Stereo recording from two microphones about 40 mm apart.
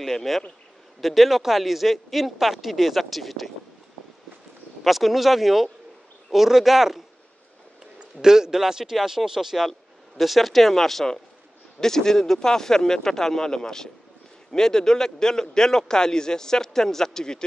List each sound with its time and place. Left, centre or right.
0.0 s a man's voice: centre
4.8 s a man's voice: centre
8.2 s a man's voice: centre